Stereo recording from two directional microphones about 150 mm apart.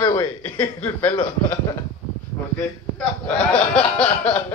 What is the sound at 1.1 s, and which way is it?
Speech, 30° left (ahead or behind).